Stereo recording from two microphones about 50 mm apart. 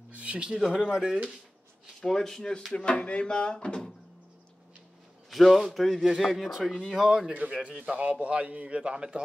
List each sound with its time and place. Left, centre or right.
0.1 s a sound: right
0.6 s speech: centre
2.0 s speech: centre
2.7 s speech: left
5.3 s a man's voice: centre
6.0 s a man's voice: centre
7.3 s a man's voice: right